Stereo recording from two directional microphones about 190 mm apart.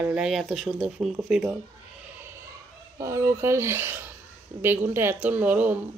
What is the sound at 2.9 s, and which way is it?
Speech, 15° right (ahead or behind).